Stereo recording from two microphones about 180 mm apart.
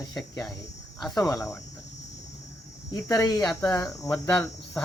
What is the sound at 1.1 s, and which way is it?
Speech, 20° left (ahead or behind).